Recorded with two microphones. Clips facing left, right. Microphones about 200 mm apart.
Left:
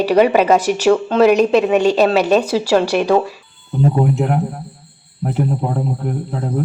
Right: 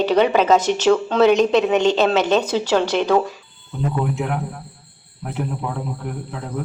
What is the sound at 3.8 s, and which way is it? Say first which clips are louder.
Speech: left 6 dB; 35° left (ahead or behind).